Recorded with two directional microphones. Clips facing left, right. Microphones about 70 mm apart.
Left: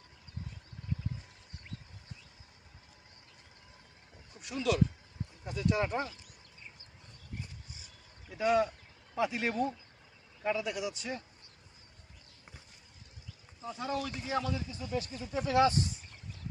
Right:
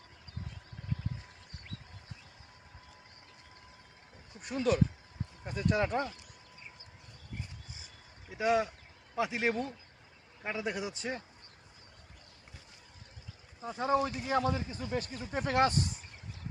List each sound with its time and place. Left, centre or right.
4.4 s a man's voice: right
8.3 s a sound: centre
10.4 s a man's voice: right
13.7 s a man's voice: right